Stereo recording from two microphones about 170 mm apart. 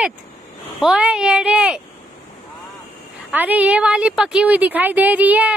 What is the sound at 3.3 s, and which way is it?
Speech, 10° right (ahead or behind).